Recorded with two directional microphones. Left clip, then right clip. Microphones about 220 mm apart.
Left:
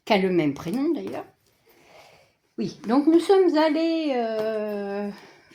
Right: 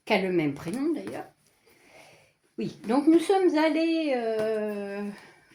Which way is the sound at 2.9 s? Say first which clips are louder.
Left 3 dB; 35° left (ahead or behind).